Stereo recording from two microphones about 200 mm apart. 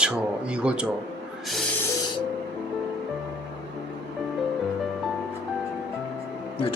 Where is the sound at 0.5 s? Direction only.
5° right (ahead or behind).